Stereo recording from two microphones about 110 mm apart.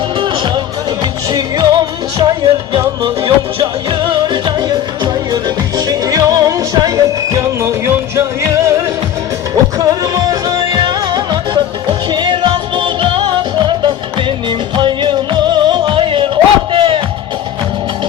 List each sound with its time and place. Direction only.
0.2 s music: 50° right (ahead or behind)
3.0 s music: 50° right (ahead or behind)